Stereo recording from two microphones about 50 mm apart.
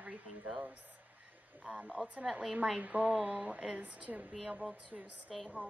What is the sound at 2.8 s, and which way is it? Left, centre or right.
Speech, right.